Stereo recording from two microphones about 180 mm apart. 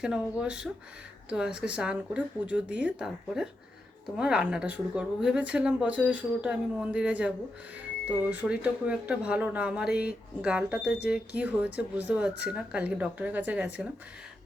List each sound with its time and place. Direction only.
0.0 s a woman's voice: 5° right (ahead or behind)